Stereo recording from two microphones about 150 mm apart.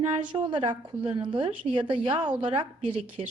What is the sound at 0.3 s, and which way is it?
A woman's voice, 35° right (ahead or behind).